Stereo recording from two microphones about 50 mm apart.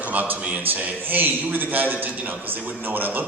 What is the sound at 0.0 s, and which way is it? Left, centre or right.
A man's voice, right.